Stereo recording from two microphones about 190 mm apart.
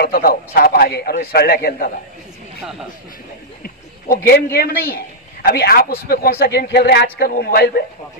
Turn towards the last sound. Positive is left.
turn(degrees=55)  # may be behind; listen again after turning